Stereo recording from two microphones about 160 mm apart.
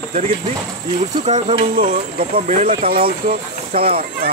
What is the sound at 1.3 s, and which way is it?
Speech, 45° right (ahead or behind).